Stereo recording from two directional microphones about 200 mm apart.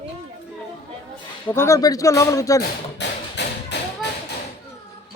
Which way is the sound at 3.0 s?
60° left (ahead or behind).